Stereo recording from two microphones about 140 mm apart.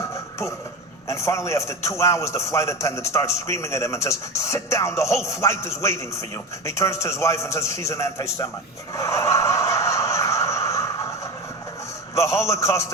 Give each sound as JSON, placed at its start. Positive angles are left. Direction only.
{"t": 1.0, "sound": "a man's voice", "side_deg": 20}
{"t": 9.0, "sound": "a sound", "side_deg": 20}
{"t": 12.1, "sound": "a man's voice", "side_deg": 20}